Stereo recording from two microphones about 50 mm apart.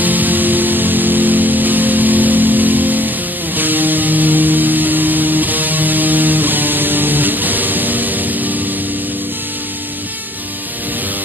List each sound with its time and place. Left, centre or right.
0.0 s music: right